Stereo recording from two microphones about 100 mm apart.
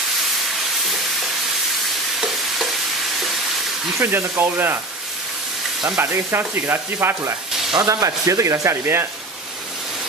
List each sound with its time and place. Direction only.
2.1 s stir: centre (ahead or behind)
4.0 s sizzle: 20° right (ahead or behind)
5.9 s sizzle: 25° right (ahead or behind)
7.7 s speech: 35° right (ahead or behind)